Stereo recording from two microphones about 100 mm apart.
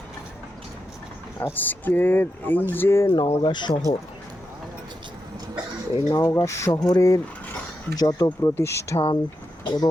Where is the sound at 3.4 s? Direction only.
50° left (ahead or behind).